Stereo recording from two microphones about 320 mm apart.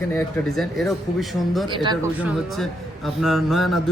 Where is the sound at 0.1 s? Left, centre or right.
Centre.